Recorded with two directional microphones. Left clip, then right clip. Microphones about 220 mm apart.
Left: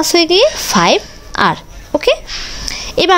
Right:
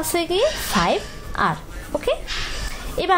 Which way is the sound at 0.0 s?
40° left (ahead or behind).